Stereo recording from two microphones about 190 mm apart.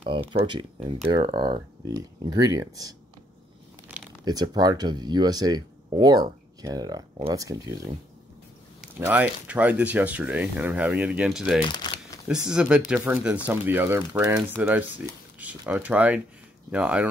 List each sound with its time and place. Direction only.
0.0 s speech: 25° right (ahead or behind)
4.2 s speech: 20° right (ahead or behind)
8.9 s speech: 10° right (ahead or behind)
11.6 s crumpling: 25° left (ahead or behind)
12.3 s speech: 5° right (ahead or behind)